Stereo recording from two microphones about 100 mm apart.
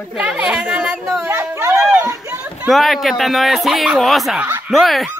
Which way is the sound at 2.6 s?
Centre (ahead or behind).